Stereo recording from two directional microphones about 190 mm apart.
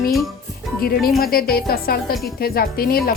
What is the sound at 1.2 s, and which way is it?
Speech, 50° left (ahead or behind).